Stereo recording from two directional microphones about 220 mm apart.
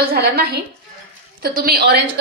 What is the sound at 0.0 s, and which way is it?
A woman's voice, 45° right (ahead or behind).